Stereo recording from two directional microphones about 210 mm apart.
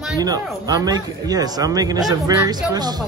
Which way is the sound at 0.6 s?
20° right (ahead or behind).